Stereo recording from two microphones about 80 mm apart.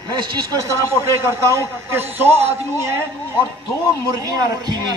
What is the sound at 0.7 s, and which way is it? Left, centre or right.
A man's voice, right.